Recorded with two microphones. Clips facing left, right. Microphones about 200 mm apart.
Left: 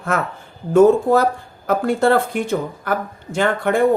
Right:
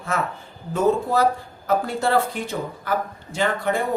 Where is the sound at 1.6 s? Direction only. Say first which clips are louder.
Left 6 dB; 55° left (ahead or behind).